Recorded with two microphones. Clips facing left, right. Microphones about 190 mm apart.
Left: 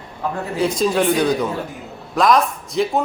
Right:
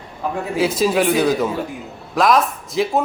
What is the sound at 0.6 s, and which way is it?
A man's voice, 5° right (ahead or behind).